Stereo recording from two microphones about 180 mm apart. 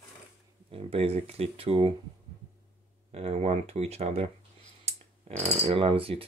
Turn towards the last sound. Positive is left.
turn(degrees=-30)  # may be behind; listen again after turning